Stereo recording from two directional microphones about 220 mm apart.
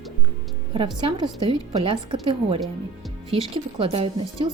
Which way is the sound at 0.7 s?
25° right (ahead or behind).